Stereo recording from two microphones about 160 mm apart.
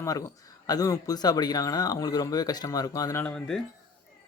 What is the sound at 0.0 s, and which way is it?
A man's voice, 20° left (ahead or behind).